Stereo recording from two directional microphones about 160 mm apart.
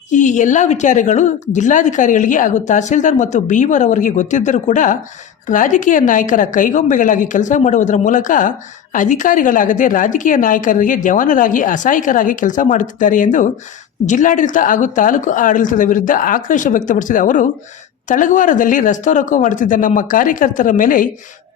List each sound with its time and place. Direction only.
0.1 s a woman's voice: 50° left (ahead or behind)